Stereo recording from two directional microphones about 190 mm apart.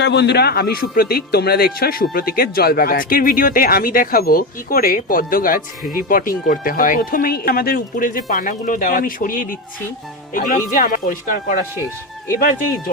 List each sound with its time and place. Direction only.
0.0 s a man's voice: 65° left (ahead or behind); by 11.6 s 45° left (ahead or behind)